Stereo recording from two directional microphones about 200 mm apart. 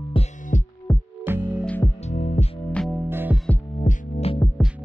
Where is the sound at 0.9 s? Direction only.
10° left (ahead or behind).